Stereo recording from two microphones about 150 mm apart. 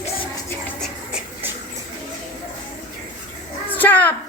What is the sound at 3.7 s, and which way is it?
Speech, 10° left (ahead or behind).